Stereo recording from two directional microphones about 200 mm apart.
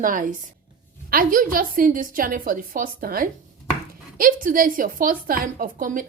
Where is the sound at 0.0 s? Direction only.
40° right (ahead or behind).